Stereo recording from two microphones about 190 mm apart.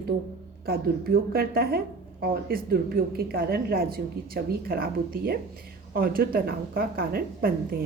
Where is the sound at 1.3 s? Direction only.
50° right (ahead or behind).